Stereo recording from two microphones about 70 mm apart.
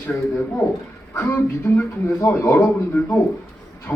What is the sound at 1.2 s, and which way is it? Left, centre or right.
Speech, left.